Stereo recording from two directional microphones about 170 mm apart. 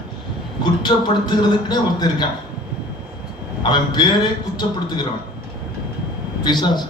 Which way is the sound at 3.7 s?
25° left (ahead or behind).